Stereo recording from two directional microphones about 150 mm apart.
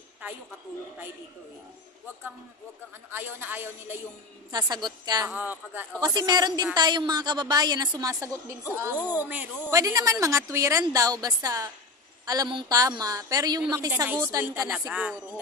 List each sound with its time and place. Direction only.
3.1 s a man's voice: 15° right (ahead or behind)
4.5 s a woman's voice: 25° right (ahead or behind)
5.3 s a man's voice: 10° right (ahead or behind)
5.9 s a woman's voice: 25° right (ahead or behind); by 9.5 s 10° right (ahead or behind)
9.7 s a woman's voice: 20° right (ahead or behind)